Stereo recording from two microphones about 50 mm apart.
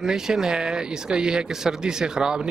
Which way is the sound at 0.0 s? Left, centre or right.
Centre.